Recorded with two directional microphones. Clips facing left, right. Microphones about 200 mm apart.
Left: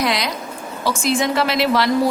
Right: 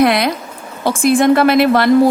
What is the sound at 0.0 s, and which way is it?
A woman's voice, 55° right (ahead or behind).